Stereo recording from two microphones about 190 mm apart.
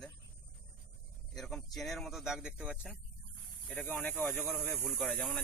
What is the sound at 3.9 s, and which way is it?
Speech, 10° left (ahead or behind).